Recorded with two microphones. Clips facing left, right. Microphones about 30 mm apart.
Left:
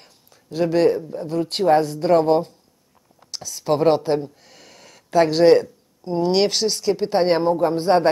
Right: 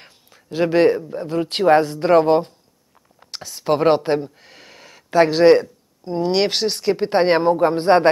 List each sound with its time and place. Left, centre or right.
0.0 s a sound: right
1.1 s speech: right
2.1 s speech: right
6.0 s speech: centre
6.5 s a woman's voice: right
7.7 s speech: right